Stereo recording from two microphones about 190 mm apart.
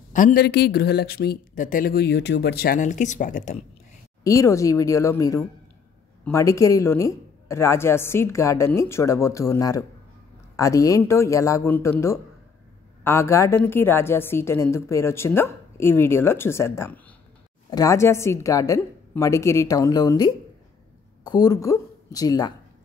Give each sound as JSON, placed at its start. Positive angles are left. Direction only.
{"t": 0.1, "sound": "speech", "side_deg": 45}
{"t": 4.2, "sound": "a woman's voice", "side_deg": 15}